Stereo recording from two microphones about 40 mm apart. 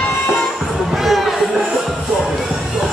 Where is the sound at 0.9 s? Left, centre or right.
Centre.